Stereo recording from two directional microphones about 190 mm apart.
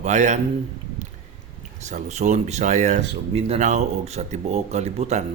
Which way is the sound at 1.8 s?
35° right (ahead or behind).